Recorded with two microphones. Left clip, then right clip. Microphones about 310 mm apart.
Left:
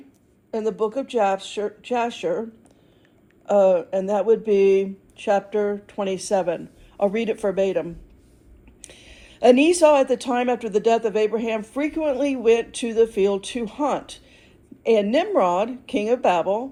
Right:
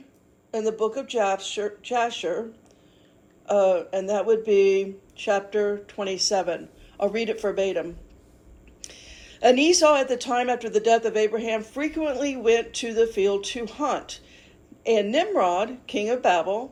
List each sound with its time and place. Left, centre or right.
0.5 s speech: left
3.4 s speech: left